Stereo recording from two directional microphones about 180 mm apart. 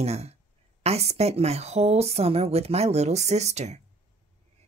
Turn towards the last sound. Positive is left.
turn(degrees=-40)  # may be behind; listen again after turning